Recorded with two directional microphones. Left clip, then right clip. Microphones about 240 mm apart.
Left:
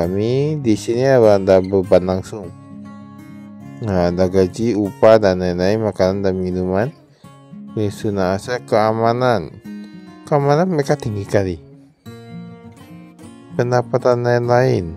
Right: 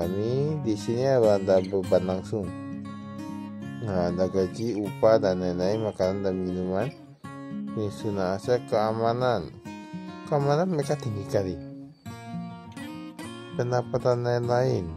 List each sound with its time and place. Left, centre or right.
0.2 s speech: left
3.8 s speech: left
13.6 s speech: left